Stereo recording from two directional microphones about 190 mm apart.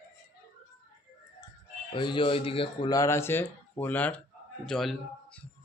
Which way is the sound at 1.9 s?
25° left (ahead or behind).